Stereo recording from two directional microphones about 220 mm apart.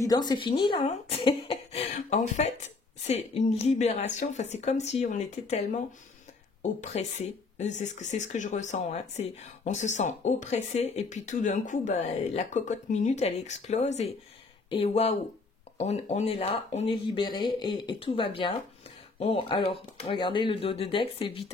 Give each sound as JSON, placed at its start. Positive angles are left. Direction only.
{"t": 0.0, "sound": "speech", "side_deg": 20}
{"t": 6.8, "sound": "speech", "side_deg": 30}